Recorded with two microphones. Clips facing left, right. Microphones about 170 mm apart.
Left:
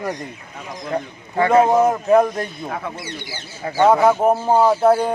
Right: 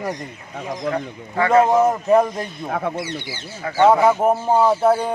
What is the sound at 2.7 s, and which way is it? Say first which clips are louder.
Speech: right 4 dB; 55° right (ahead or behind).